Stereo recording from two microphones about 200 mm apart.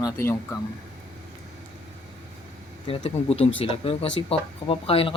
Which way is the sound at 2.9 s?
30° left (ahead or behind).